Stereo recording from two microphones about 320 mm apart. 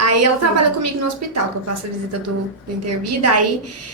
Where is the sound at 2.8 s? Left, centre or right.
Right.